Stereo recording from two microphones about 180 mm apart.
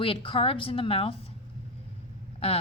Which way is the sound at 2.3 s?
30° left (ahead or behind).